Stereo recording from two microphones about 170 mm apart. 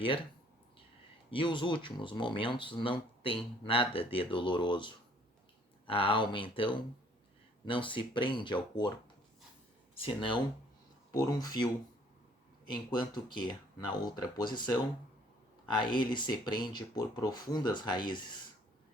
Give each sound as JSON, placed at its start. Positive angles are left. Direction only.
{"t": 1.3, "sound": "speech", "side_deg": 30}
{"t": 9.9, "sound": "speech", "side_deg": 35}
{"t": 12.9, "sound": "speech", "side_deg": 25}